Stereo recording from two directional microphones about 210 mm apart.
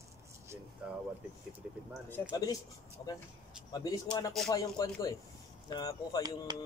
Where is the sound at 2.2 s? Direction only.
10° left (ahead or behind).